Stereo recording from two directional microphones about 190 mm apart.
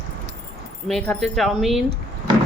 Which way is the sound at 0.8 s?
5° left (ahead or behind).